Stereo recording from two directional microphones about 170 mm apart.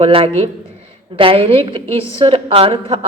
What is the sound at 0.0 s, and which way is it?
A man's voice, 35° right (ahead or behind).